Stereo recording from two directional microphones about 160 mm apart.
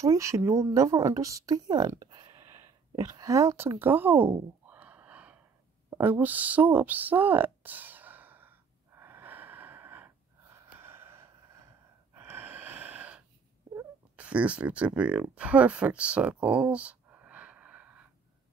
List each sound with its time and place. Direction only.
0.0 s speech: 20° right (ahead or behind)
2.4 s a sound: 15° right (ahead or behind)
13.7 s speech: 10° right (ahead or behind)